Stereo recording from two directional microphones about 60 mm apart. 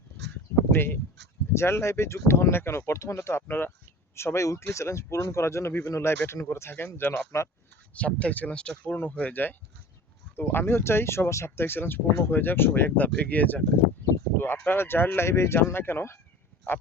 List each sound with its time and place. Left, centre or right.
0.5 s a sound: left
1.5 s speech: left
3.4 s speech: left
7.9 s speech: left
14.3 s speech: left